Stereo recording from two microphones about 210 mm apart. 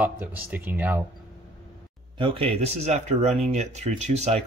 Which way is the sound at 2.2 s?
25° right (ahead or behind).